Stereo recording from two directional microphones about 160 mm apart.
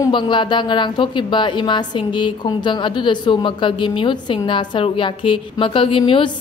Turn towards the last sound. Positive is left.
turn(degrees=30)  # may be behind; listen again after turning